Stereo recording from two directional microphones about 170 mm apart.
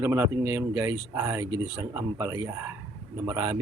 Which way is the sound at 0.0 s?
15° right (ahead or behind).